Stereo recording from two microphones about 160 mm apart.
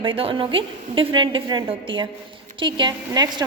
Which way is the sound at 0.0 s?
35° right (ahead or behind).